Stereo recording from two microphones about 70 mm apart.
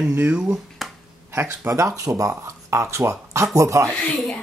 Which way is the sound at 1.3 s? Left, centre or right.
Right.